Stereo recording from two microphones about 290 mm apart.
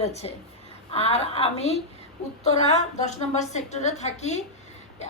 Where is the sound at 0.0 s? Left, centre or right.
Left.